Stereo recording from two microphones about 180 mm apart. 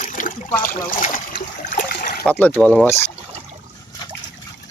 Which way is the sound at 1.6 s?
50° left (ahead or behind).